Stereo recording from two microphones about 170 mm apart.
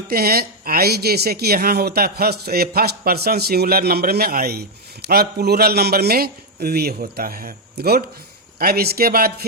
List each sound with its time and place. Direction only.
0.1 s speech: 65° right (ahead or behind)